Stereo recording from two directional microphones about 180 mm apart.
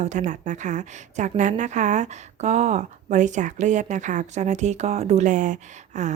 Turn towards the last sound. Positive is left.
turn(degrees=-40)  # may be behind; listen again after turning